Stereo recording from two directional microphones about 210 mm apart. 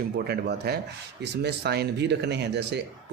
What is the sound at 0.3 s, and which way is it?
Speech, 50° right (ahead or behind).